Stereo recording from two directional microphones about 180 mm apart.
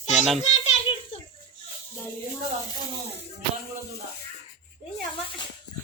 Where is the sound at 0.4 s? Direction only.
40° left (ahead or behind).